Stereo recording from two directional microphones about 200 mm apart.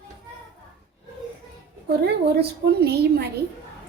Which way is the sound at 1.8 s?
55° right (ahead or behind).